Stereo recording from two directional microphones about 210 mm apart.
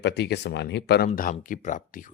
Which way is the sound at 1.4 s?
40° left (ahead or behind).